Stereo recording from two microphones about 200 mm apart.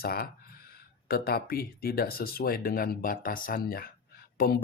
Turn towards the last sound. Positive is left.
turn(degrees=50)  # may be behind; listen again after turning